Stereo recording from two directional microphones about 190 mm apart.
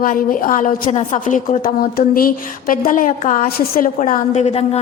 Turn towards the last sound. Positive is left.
turn(degrees=35)  # may be behind; listen again after turning